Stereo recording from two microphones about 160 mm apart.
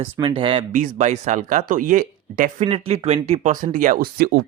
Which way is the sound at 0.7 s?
50° right (ahead or behind).